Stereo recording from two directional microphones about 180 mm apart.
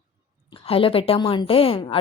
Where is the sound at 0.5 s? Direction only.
30° left (ahead or behind).